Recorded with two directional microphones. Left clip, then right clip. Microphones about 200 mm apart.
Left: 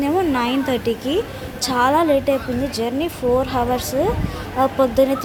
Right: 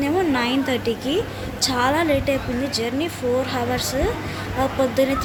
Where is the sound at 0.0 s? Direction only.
30° left (ahead or behind).